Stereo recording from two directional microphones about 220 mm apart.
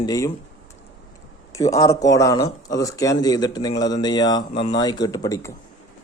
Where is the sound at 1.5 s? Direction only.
15° left (ahead or behind).